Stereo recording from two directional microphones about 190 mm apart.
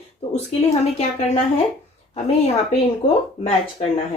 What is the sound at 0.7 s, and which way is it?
Speech, 35° left (ahead or behind).